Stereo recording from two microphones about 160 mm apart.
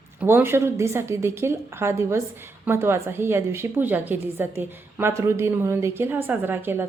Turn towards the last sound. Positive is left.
turn(degrees=-15)  # may be behind; listen again after turning